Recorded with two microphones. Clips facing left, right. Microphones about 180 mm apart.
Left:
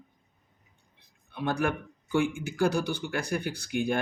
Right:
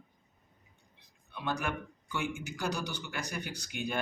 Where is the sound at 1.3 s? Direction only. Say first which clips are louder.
Left 7 dB; 50° left (ahead or behind).